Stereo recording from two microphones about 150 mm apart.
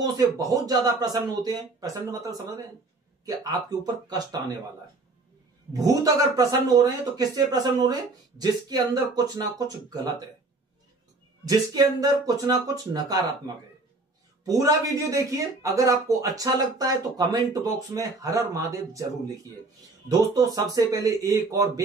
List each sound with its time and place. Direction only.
0.0 s speech: 25° right (ahead or behind)
5.7 s speech: 25° right (ahead or behind)
11.4 s speech: 25° right (ahead or behind)
14.4 s speech: 25° right (ahead or behind)